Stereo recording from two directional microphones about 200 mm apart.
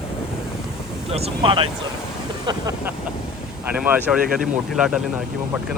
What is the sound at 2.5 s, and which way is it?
Speech, 15° right (ahead or behind).